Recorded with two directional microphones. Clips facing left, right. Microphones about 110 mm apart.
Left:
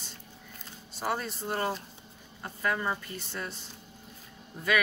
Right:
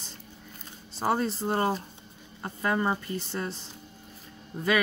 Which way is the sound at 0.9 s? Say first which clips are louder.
Right 6 dB; 35° right (ahead or behind).